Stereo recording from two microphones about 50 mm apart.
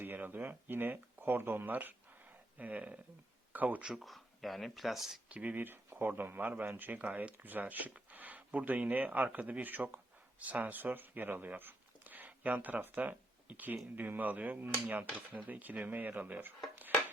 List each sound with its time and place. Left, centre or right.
0.0 s speech: right
3.8 s speech: centre
5.3 s speech: right